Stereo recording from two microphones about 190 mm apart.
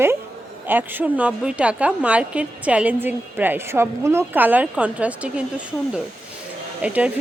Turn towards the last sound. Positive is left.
turn(degrees=-5)  # may be behind; listen again after turning